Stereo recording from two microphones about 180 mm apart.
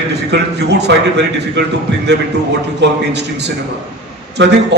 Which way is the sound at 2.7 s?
70° right (ahead or behind).